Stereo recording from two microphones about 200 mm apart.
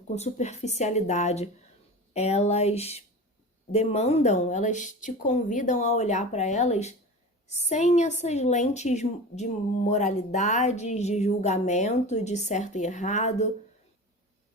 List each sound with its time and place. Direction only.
0.1 s a woman's voice: 35° left (ahead or behind)